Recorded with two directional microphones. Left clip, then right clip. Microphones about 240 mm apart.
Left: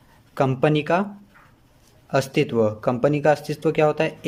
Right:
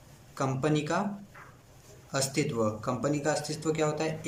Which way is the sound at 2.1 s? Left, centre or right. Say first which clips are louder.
Left 10 dB; left.